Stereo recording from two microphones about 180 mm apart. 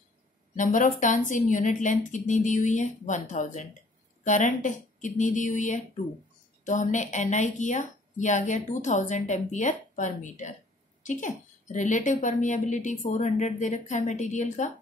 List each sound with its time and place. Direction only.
0.6 s speech: 45° left (ahead or behind)